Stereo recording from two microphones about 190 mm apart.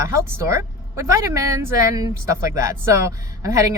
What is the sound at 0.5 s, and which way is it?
Speech, 15° right (ahead or behind).